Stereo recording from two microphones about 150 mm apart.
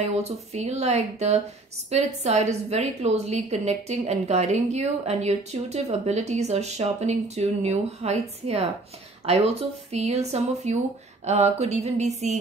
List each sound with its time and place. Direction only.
0.0 s a woman's voice: 45° right (ahead or behind)